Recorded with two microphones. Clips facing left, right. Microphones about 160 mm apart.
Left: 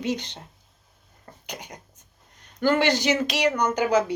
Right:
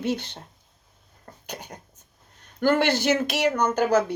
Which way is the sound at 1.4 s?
10° left (ahead or behind).